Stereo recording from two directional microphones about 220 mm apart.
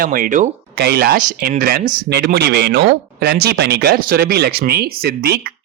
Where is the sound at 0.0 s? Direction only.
40° right (ahead or behind).